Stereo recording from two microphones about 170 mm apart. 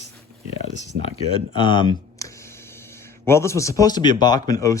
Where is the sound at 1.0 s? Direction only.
30° left (ahead or behind).